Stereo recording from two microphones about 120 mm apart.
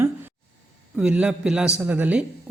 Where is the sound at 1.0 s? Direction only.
10° right (ahead or behind).